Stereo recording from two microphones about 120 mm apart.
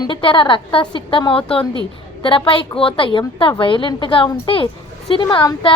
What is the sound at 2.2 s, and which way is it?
A woman's voice, 45° left (ahead or behind).